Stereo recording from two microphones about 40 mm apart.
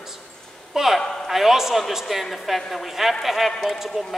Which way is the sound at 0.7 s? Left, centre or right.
Centre.